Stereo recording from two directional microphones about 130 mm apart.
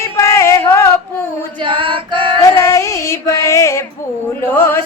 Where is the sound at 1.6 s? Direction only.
40° right (ahead or behind).